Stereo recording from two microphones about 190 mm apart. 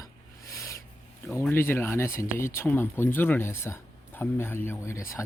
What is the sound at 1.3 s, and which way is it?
Speech, 15° left (ahead or behind).